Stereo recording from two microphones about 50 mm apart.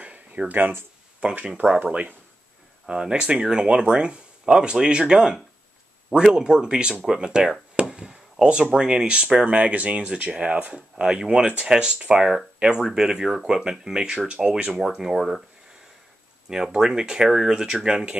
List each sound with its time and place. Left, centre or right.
0.0 s a sound: right
1.2 s speech: right
2.9 s speech: centre
11.1 s speech: centre
14.8 s speech: centre
16.4 s speech: centre